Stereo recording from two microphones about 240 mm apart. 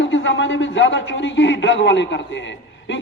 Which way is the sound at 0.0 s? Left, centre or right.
Left.